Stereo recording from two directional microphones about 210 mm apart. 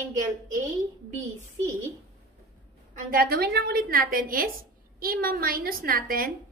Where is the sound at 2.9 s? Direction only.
45° right (ahead or behind).